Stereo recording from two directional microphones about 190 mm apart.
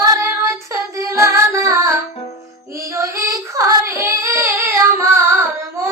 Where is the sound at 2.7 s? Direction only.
15° right (ahead or behind).